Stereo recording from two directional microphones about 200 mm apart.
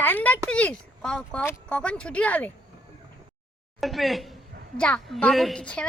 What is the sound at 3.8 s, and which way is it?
A woman's voice, centre (ahead or behind).